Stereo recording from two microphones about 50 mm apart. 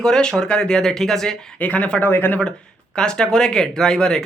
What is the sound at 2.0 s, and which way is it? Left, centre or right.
Speech, left.